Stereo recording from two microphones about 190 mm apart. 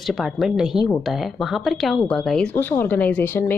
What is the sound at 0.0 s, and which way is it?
Speech, centre (ahead or behind).